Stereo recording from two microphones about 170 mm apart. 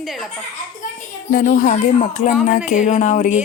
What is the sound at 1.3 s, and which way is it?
Speech, 55° left (ahead or behind).